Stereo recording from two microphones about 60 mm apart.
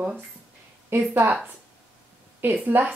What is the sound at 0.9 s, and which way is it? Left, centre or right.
Speech, right.